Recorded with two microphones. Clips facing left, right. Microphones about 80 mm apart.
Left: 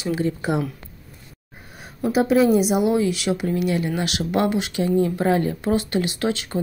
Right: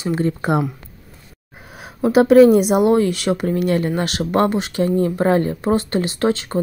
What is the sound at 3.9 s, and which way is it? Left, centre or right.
Speech, right.